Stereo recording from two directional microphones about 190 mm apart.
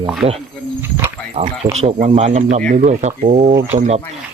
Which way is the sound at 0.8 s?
10° right (ahead or behind).